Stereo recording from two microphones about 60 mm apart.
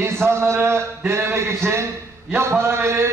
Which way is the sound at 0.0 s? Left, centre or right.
Right.